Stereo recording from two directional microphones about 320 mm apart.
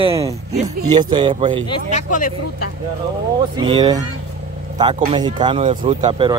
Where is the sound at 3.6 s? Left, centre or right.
Centre.